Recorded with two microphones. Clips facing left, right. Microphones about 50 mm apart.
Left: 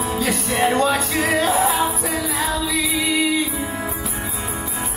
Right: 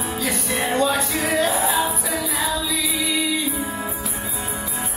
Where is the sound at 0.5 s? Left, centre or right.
Left.